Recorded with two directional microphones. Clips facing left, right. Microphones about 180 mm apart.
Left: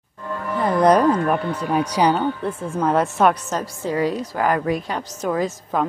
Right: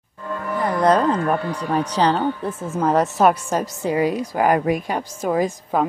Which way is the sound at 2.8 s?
Centre (ahead or behind).